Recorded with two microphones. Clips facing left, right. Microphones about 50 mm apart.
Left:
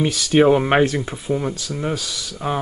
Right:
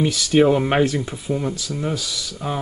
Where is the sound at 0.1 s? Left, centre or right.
Left.